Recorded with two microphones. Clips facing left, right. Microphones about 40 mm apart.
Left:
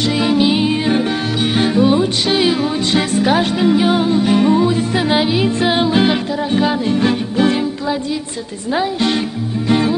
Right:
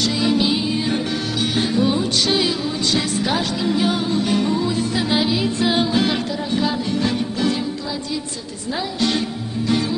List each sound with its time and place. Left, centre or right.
0.2 s music: left
9.7 s music: left